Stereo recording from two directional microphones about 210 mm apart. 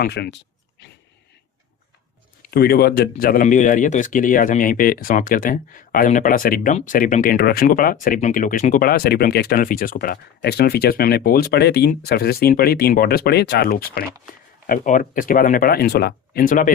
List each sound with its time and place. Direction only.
0.0 s speech: 50° left (ahead or behind)
2.5 s speech: 45° left (ahead or behind)